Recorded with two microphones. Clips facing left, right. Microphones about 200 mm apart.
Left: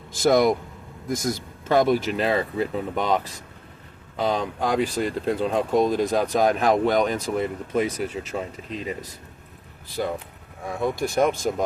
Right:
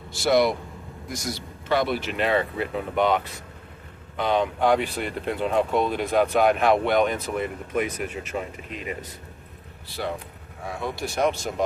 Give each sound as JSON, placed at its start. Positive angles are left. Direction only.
{"t": 0.2, "sound": "speech", "side_deg": 45}
{"t": 4.2, "sound": "speech", "side_deg": 35}
{"t": 10.8, "sound": "speech", "side_deg": 50}